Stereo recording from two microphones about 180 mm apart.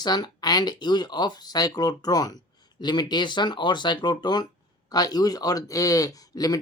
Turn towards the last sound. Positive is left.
turn(degrees=20)  # may be behind; listen again after turning